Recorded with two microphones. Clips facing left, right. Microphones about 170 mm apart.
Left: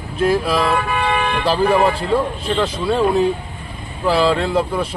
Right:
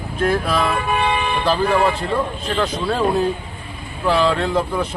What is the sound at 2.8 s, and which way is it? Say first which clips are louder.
Speech: left 3 dB; centre (ahead or behind).